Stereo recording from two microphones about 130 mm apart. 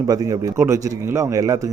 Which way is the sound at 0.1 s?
30° right (ahead or behind).